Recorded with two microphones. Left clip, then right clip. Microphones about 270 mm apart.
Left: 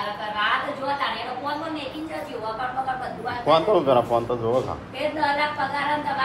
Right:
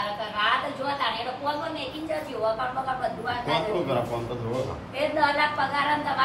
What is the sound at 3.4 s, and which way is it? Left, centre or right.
Speech, left.